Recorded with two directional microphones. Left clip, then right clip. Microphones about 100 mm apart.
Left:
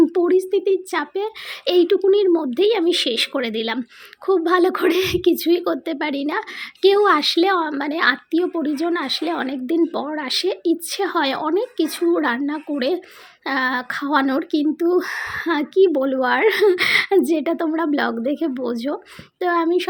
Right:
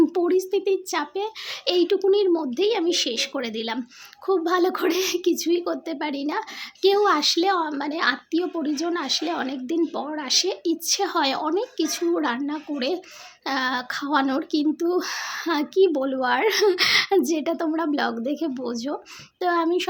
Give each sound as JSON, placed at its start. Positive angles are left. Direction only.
{"t": 0.1, "sound": "a woman's voice", "side_deg": 35}
{"t": 15.9, "sound": "a woman's voice", "side_deg": 40}
{"t": 19.4, "sound": "a child's voice", "side_deg": 30}